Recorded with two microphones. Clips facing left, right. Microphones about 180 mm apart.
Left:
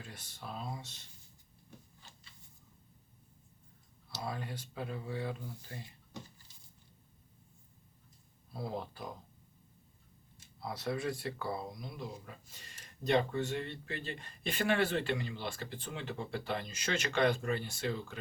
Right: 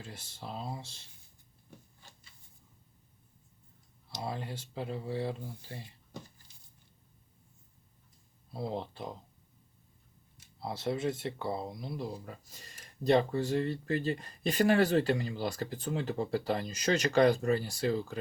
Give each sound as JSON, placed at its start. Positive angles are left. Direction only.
{"t": 0.0, "sound": "speech", "side_deg": -25}
{"t": 4.1, "sound": "speech", "side_deg": -25}
{"t": 8.5, "sound": "speech", "side_deg": -25}
{"t": 10.6, "sound": "speech", "side_deg": -25}